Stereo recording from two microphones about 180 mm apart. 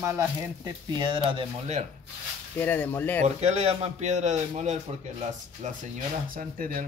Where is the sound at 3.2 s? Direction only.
40° right (ahead or behind).